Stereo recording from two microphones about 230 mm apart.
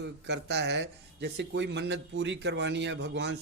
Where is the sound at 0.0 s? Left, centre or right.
Right.